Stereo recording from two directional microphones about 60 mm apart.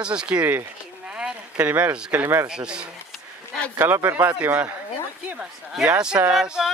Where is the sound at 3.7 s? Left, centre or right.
Right.